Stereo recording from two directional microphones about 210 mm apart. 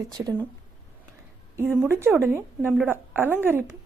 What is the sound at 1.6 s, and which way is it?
A woman's voice, 10° right (ahead or behind).